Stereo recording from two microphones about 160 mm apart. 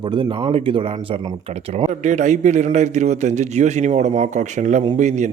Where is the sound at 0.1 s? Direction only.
30° right (ahead or behind).